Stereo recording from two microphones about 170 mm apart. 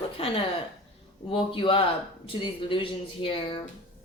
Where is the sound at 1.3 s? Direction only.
30° left (ahead or behind).